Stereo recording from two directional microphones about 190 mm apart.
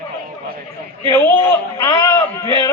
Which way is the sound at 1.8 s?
15° left (ahead or behind).